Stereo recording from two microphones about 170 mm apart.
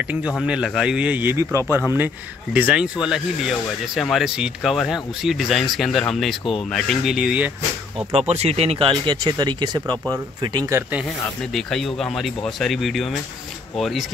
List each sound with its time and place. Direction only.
0.4 s speech: 5° right (ahead or behind)
8.1 s speech: 35° right (ahead or behind)
11.5 s speech: centre (ahead or behind)